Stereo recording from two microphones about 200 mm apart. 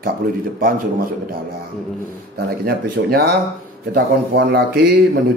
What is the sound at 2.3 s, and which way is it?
Speech, 50° right (ahead or behind).